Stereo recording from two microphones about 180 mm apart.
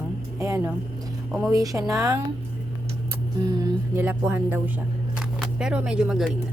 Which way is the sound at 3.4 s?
25° right (ahead or behind).